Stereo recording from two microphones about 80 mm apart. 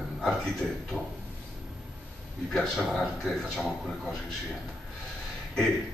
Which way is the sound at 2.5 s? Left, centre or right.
Centre.